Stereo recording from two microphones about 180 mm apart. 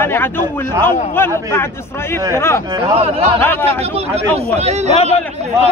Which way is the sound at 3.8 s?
35° right (ahead or behind).